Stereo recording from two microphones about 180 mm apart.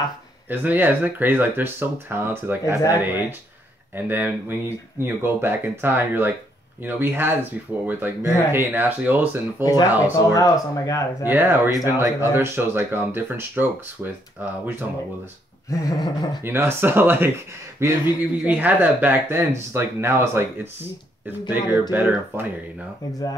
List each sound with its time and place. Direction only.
0.5 s speech: 10° right (ahead or behind)
10.1 s speech: 20° left (ahead or behind)
11.2 s speech: 10° right (ahead or behind)
15.7 s speech: 20° left (ahead or behind)
16.4 s speech: 10° right (ahead or behind)